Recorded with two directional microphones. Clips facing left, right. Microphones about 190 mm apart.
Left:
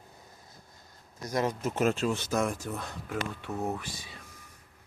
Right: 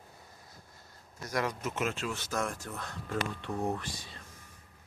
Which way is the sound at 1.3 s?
25° left (ahead or behind).